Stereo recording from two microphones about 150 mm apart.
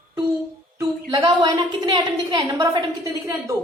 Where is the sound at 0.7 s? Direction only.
25° right (ahead or behind).